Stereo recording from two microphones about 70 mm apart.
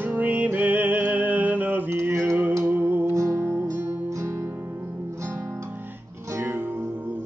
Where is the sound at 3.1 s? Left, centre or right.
Right.